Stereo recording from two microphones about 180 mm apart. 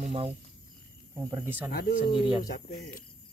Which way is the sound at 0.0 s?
35° right (ahead or behind).